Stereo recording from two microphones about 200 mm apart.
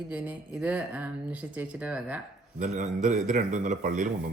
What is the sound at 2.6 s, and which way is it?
A man's voice, 35° right (ahead or behind).